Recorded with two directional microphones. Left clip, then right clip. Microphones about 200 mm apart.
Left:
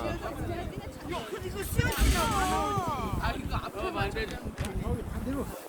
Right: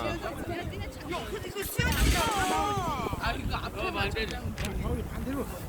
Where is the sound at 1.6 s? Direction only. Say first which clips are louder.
Right 2 dB; 45° left (ahead or behind).